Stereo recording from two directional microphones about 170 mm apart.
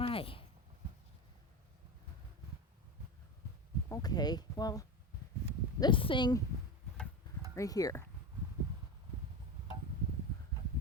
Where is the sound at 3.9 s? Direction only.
25° left (ahead or behind).